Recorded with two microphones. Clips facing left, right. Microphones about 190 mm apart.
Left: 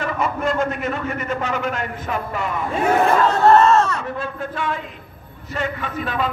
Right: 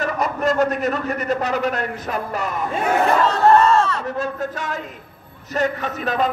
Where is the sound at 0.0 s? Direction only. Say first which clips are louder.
Right 1 dB; 40° right (ahead or behind).